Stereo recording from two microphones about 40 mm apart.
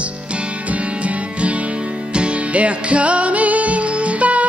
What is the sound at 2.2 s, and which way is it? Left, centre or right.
Music, right.